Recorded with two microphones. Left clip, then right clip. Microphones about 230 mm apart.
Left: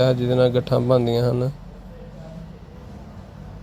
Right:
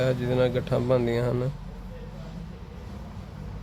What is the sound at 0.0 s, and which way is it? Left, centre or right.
Speech, centre.